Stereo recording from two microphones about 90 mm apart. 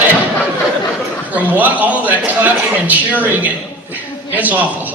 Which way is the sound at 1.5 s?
20° right (ahead or behind).